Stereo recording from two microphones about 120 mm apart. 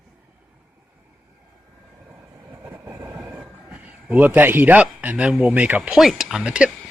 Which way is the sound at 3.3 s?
10° right (ahead or behind).